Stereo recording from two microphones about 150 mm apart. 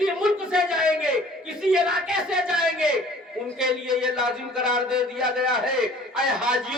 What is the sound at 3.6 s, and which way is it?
A man's voice, 5° right (ahead or behind).